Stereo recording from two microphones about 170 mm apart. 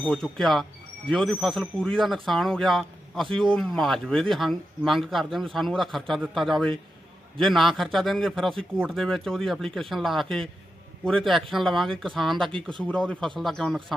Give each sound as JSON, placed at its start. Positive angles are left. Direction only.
{"t": 0.0, "sound": "a man's voice", "side_deg": 0}